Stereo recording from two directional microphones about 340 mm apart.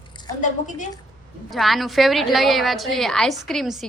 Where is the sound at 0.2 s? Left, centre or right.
Centre.